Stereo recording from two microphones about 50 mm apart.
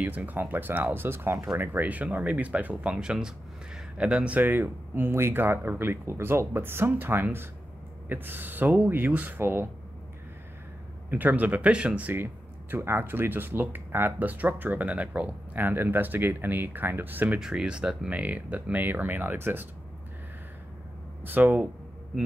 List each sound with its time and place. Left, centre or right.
0.0 s speech: right
1.6 s speech: right
4.4 s speech: right
9.4 s speech: right
11.1 s speech: right
12.7 s speech: right
17.4 s speech: centre
18.1 s speech: right
21.2 s speech: right